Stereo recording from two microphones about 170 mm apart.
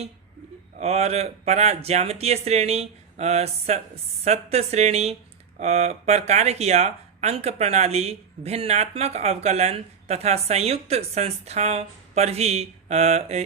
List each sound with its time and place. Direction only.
0.8 s speech: 40° right (ahead or behind)